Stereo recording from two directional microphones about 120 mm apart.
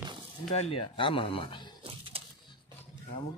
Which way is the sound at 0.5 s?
55° left (ahead or behind).